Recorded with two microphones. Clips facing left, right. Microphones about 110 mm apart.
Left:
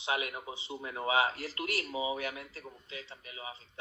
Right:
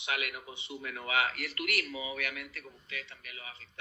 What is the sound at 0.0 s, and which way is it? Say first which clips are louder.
Speech: left 3 dB; 25° left (ahead or behind).